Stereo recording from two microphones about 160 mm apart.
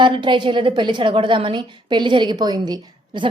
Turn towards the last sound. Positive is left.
turn(degrees=-25)  # may be behind; listen again after turning